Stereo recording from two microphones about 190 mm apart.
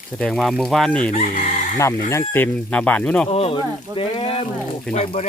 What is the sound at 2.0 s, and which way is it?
Speech, 15° left (ahead or behind).